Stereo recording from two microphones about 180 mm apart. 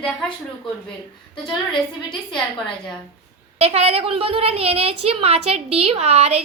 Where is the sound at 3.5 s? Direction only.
35° right (ahead or behind).